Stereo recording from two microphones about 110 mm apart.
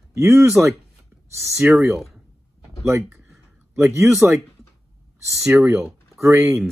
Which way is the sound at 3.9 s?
5° right (ahead or behind).